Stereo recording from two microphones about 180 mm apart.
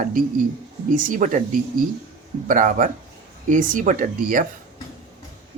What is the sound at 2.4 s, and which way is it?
Speech, 45° right (ahead or behind).